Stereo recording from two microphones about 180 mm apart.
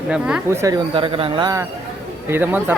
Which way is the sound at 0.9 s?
30° right (ahead or behind).